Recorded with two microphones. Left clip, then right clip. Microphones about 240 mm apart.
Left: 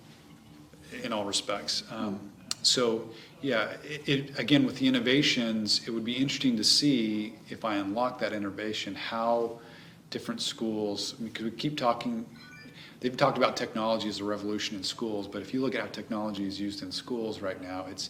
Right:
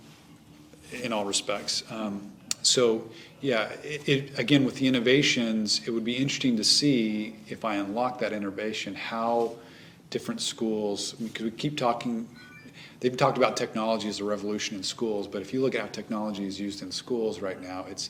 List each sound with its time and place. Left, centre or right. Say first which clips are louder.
0.9 s speech: right 3 dB; right